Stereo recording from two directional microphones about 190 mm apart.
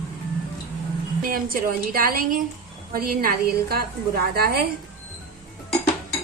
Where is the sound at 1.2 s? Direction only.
50° right (ahead or behind).